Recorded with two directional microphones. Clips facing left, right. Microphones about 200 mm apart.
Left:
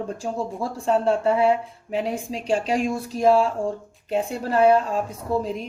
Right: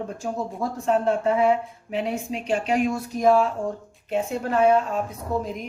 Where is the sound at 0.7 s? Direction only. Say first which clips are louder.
Left 1 dB; 30° left (ahead or behind).